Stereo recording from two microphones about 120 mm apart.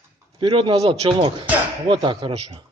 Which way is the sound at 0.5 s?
55° right (ahead or behind).